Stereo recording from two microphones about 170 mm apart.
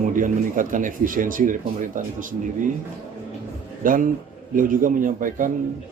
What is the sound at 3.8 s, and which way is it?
Speech, 55° right (ahead or behind).